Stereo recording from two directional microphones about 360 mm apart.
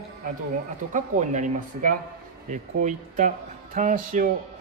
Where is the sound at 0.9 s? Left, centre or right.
Right.